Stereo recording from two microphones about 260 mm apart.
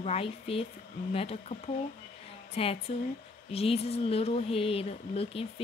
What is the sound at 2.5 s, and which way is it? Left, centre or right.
Speech, left.